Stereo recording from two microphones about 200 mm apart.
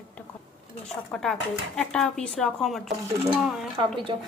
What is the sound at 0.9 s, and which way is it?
A woman's voice, centre (ahead or behind).